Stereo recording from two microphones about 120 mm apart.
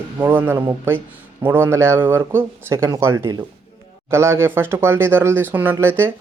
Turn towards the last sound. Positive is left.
turn(degrees=-20)  # may be behind; listen again after turning